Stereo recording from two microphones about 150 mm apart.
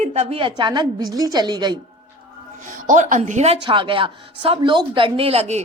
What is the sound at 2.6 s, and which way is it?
Speech, 60° right (ahead or behind).